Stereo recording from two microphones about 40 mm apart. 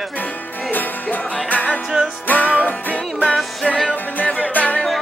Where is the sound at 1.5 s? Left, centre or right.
Left.